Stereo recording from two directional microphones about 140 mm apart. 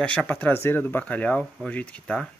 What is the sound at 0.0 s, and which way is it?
Speech, 10° left (ahead or behind).